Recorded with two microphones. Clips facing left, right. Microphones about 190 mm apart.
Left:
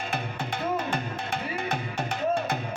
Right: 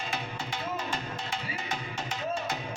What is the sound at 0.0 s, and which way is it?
Music, 55° left (ahead or behind).